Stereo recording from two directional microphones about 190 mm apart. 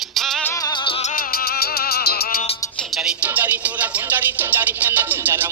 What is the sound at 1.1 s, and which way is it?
Music, 50° left (ahead or behind).